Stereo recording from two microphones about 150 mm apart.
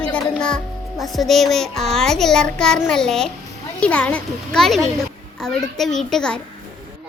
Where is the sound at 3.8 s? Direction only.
10° left (ahead or behind).